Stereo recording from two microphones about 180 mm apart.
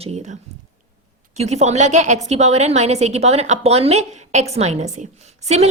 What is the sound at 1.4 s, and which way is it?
A woman's voice, 40° right (ahead or behind).